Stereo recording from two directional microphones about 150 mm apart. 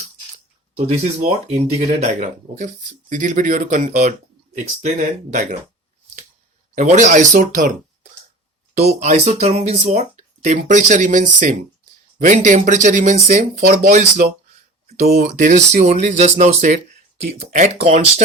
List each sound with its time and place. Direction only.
0.8 s speech: 50° right (ahead or behind)
6.7 s speech: 55° right (ahead or behind)
9.0 s speech: 50° right (ahead or behind)
14.9 s speech: 80° right; by 18.0 s 50° right (ahead or behind)